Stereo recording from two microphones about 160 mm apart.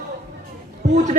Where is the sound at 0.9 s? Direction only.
50° right (ahead or behind).